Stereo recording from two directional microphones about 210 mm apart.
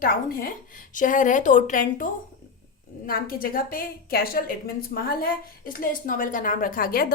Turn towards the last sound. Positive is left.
turn(degrees=45)  # may be behind; listen again after turning